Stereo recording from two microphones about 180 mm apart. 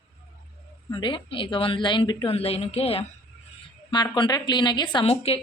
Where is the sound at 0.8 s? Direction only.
25° left (ahead or behind).